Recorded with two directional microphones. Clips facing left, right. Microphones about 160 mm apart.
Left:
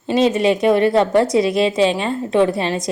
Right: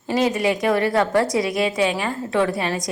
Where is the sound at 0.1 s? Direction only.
25° left (ahead or behind).